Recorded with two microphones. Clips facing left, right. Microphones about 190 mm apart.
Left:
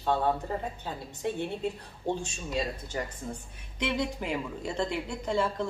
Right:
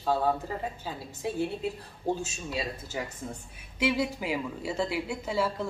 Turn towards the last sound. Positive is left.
turn(degrees=-5)  # may be behind; listen again after turning